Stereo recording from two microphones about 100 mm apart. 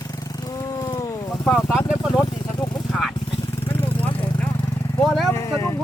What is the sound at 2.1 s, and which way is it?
Vehicle, 40° left (ahead or behind).